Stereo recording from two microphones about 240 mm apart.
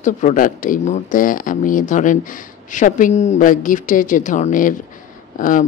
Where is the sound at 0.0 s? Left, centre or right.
Left.